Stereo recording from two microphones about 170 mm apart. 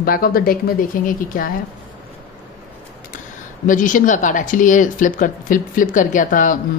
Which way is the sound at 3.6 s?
50° left (ahead or behind).